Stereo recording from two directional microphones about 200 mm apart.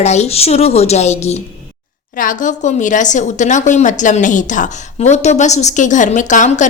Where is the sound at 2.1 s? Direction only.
40° left (ahead or behind).